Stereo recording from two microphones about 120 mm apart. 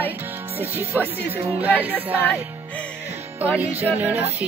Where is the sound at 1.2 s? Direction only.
55° right (ahead or behind).